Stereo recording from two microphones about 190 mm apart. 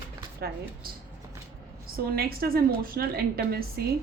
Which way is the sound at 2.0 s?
50° right (ahead or behind).